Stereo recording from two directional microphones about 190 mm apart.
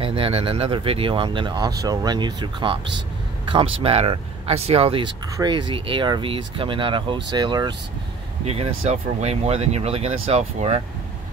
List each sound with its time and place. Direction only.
0.0 s speech: 30° right (ahead or behind)